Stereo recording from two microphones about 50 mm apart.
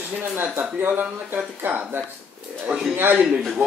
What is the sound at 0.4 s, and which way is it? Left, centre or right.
Speech, right.